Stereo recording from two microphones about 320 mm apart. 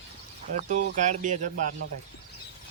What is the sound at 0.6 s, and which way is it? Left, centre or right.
Speech, right.